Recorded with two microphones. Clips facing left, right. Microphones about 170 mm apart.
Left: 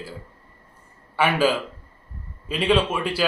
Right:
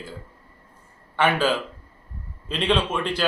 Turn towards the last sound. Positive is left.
turn(degrees=10)  # may be behind; listen again after turning